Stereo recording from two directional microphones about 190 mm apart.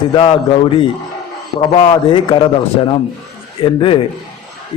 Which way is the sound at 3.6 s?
30° left (ahead or behind).